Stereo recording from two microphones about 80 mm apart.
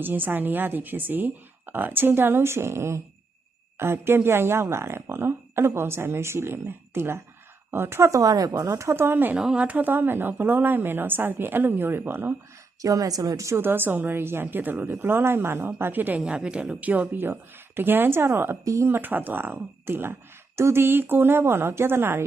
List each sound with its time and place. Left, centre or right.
0.0 s a woman's voice: right
9.4 s a woman's voice: centre
12.8 s a woman's voice: right
18.9 s a woman's voice: right